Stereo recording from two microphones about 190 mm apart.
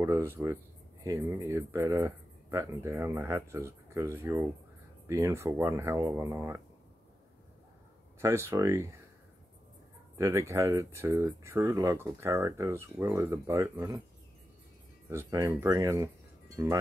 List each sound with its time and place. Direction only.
0.0 s speech: 15° right (ahead or behind)
8.2 s speech: 15° right (ahead or behind)
10.1 s speech: 15° right (ahead or behind)
15.0 s speech: 15° right (ahead or behind)